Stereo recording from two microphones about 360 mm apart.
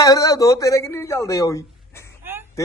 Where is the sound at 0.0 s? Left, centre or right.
Centre.